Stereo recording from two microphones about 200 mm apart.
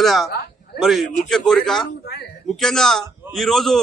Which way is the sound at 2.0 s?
55° left (ahead or behind).